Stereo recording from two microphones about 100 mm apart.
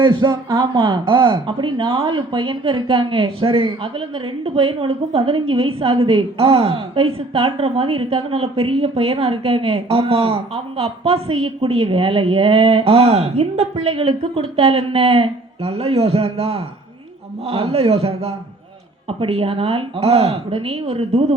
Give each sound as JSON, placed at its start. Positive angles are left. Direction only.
{"t": 0.0, "sound": "a man's voice", "side_deg": -55}
{"t": 19.0, "sound": "speech", "side_deg": -75}